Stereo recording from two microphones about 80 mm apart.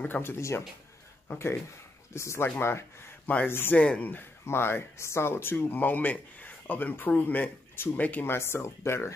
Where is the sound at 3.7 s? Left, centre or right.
Centre; by 9.1 s left.